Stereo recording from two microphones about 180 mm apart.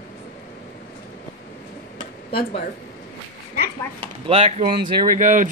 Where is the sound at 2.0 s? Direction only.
30° left (ahead or behind).